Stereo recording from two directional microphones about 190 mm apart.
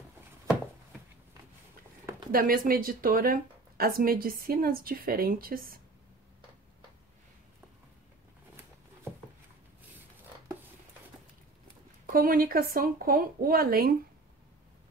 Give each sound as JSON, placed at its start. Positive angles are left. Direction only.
{"t": 2.3, "sound": "speech", "side_deg": -45}
{"t": 12.1, "sound": "speech", "side_deg": -50}